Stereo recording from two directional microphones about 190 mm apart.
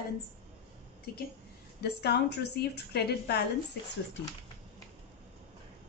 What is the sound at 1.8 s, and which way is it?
A woman's voice, 60° left (ahead or behind).